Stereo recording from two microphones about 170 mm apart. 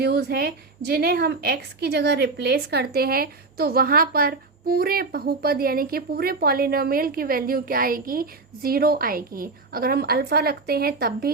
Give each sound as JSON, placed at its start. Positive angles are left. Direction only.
{"t": 0.0, "sound": "a woman's voice", "side_deg": -65}